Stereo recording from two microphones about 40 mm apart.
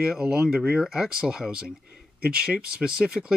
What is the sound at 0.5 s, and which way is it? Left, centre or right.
Speech, right.